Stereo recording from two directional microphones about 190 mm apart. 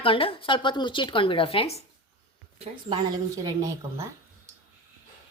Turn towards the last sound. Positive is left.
turn(degrees=-15)  # may be behind; listen again after turning